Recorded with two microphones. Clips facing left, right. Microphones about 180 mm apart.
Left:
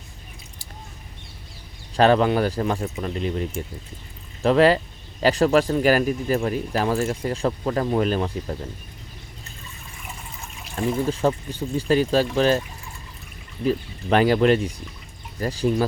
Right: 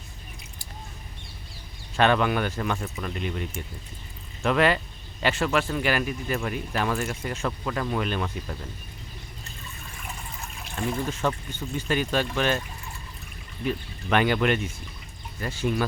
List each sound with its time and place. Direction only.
2.0 s speech: 35° left (ahead or behind)
10.8 s speech: 35° left (ahead or behind)
13.7 s speech: 35° left (ahead or behind)